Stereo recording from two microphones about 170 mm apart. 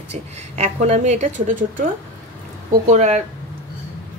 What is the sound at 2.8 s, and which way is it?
Speech, 45° right (ahead or behind).